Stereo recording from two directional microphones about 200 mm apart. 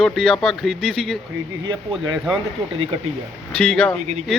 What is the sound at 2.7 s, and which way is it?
Speech, 30° right (ahead or behind).